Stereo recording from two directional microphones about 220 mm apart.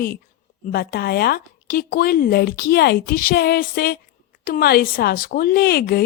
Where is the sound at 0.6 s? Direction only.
45° left (ahead or behind).